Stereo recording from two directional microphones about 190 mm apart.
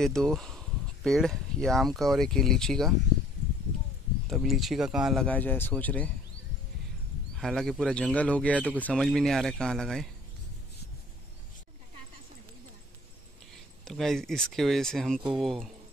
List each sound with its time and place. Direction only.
0.0 s speech: 5° left (ahead or behind)
4.3 s speech: centre (ahead or behind)
7.3 s speech: centre (ahead or behind)
13.8 s speech: centre (ahead or behind)